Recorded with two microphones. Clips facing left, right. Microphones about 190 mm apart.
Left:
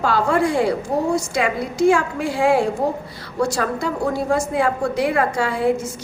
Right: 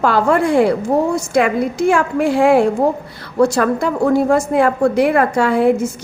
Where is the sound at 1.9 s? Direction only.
55° right (ahead or behind).